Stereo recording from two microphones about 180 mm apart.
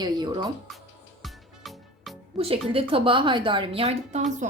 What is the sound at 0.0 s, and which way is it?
Speech, 25° right (ahead or behind).